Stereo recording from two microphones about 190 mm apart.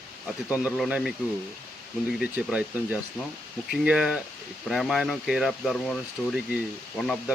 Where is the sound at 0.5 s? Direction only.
5° right (ahead or behind).